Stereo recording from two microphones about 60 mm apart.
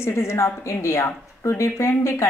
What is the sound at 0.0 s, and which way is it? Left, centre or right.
Speech, left.